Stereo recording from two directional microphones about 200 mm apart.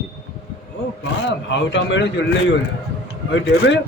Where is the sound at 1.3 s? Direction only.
65° left (ahead or behind).